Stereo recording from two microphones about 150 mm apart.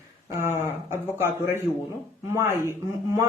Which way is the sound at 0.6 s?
15° right (ahead or behind).